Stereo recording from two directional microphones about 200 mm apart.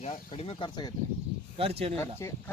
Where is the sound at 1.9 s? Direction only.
15° left (ahead or behind).